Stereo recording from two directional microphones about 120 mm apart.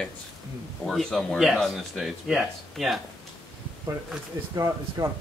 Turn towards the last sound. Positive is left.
turn(degrees=-30)  # may be behind; listen again after turning